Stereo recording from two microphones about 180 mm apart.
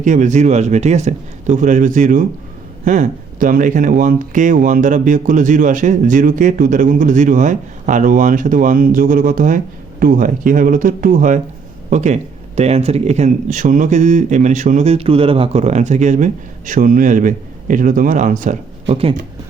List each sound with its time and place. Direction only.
0.0 s speech: 45° right (ahead or behind)
18.9 s speech: 35° right (ahead or behind)